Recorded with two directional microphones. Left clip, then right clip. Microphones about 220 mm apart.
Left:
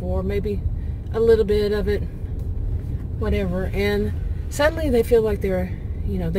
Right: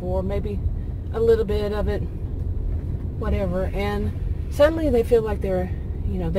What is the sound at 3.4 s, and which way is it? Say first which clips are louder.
Speech: even; 25° left (ahead or behind).